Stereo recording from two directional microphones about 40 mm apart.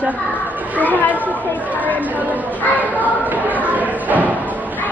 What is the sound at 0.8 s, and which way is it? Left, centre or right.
Speech, left.